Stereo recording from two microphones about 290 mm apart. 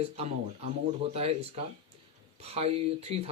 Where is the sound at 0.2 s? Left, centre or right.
Right.